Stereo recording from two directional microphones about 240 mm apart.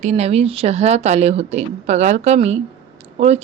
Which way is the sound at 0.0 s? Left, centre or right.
Right.